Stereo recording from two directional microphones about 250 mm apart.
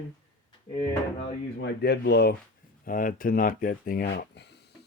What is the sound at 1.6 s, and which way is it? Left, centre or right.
Speech, left.